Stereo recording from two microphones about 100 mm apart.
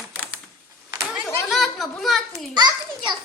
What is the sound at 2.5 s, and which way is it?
Speech, 45° right (ahead or behind).